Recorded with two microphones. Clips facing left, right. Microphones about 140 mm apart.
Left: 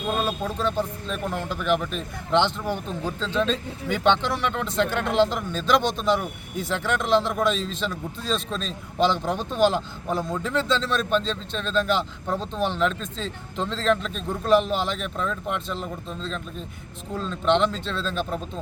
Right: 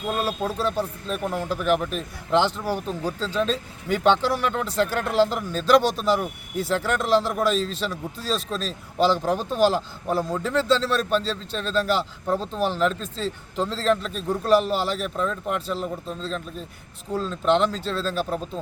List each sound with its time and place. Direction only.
0.2 s a man's voice: 5° right (ahead or behind)